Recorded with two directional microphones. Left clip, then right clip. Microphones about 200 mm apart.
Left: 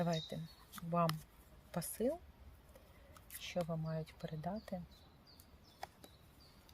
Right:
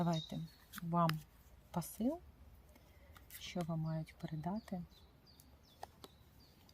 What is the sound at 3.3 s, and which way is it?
Speech, 15° left (ahead or behind).